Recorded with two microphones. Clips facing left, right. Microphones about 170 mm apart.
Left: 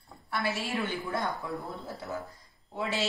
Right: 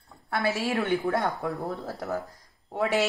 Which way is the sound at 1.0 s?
70° right (ahead or behind).